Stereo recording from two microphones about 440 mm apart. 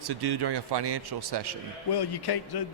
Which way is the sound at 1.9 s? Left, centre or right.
Left.